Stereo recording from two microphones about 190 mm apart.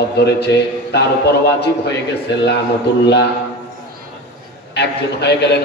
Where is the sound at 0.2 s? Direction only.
60° left (ahead or behind).